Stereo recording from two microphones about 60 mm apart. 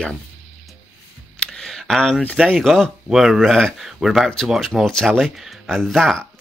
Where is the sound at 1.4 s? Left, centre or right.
Centre.